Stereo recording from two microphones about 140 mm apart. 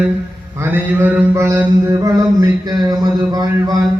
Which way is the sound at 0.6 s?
15° right (ahead or behind).